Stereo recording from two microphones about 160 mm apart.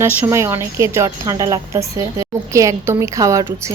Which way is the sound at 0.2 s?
15° right (ahead or behind).